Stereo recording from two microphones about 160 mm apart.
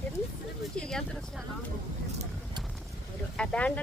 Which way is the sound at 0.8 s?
5° left (ahead or behind).